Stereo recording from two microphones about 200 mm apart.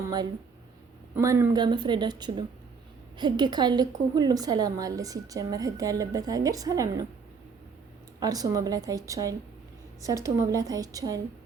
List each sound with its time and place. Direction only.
1.1 s a woman's voice: 15° right (ahead or behind)
8.2 s a woman's voice: 20° right (ahead or behind)